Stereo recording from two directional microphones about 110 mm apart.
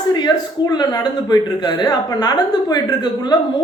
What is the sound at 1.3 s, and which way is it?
A woman's voice, 40° left (ahead or behind).